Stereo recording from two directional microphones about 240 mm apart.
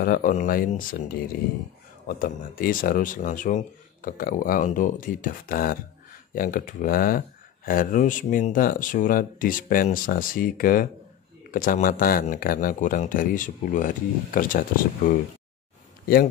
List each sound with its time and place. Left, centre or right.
0.0 s speech: left